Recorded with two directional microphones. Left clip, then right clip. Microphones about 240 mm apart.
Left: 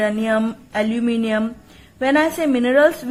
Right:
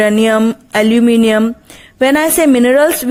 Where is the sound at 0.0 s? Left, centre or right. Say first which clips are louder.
Right 8 dB; right.